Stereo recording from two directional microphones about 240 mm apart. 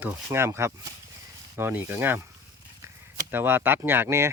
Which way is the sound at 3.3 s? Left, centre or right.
Centre.